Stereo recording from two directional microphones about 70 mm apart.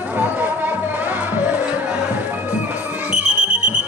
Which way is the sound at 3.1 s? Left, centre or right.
Centre.